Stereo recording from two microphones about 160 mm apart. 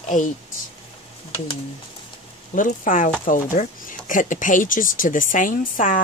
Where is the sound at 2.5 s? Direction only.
55° left (ahead or behind).